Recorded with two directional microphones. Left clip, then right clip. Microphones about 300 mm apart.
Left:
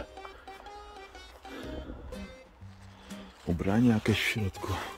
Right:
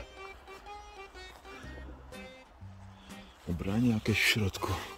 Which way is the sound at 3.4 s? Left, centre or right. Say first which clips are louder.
Left 5 dB; centre.